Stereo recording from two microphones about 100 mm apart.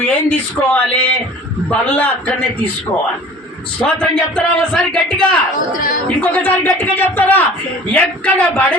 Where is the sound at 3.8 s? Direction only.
10° left (ahead or behind).